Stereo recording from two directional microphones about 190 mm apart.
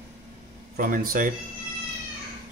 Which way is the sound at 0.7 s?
45° right (ahead or behind).